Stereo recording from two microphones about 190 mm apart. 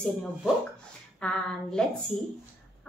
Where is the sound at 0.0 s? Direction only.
5° left (ahead or behind).